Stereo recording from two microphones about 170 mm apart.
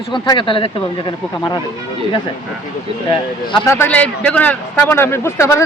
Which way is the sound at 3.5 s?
15° left (ahead or behind).